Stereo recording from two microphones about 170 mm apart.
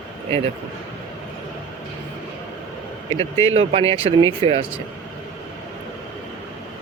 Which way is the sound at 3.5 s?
35° right (ahead or behind).